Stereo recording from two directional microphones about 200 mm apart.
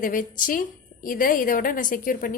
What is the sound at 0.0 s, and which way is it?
A woman's voice, 40° left (ahead or behind).